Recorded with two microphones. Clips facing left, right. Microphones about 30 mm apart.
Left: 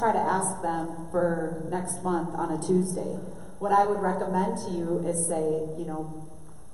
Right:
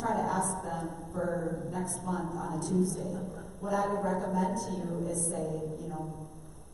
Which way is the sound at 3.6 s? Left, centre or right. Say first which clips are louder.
Left 9 dB; left.